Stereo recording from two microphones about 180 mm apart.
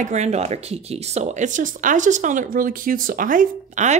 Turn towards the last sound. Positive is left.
turn(degrees=-45)  # may be behind; listen again after turning